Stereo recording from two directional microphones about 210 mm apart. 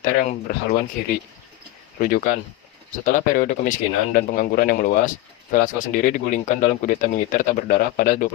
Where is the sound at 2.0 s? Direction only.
40° left (ahead or behind).